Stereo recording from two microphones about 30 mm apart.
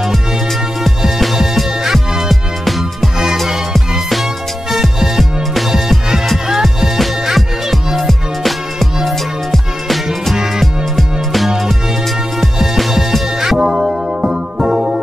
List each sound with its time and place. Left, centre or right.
1.2 s music: centre
4.1 s music: centre
6.5 s music: centre
8.1 s music: centre
10.3 s music: centre
13.6 s music: centre